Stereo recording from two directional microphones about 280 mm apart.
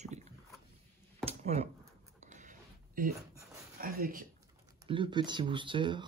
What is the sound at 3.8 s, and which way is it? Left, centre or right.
Speech, right.